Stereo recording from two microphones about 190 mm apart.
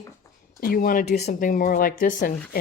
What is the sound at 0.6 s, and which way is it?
Speech, 50° left (ahead or behind).